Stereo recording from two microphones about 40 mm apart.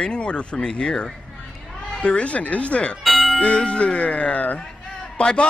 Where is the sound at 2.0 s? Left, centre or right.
Left.